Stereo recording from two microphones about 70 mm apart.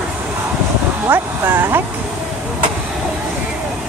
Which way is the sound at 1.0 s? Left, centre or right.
Right.